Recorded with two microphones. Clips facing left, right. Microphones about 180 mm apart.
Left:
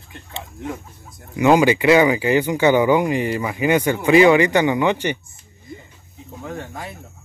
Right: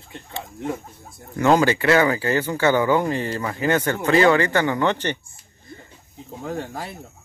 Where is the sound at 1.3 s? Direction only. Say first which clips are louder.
Left 3 dB; 15° left (ahead or behind).